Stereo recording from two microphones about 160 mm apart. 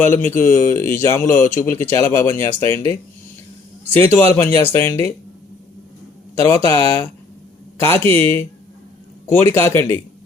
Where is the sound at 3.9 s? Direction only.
15° left (ahead or behind).